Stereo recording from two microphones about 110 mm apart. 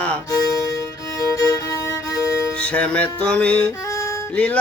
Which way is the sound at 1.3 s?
30° left (ahead or behind).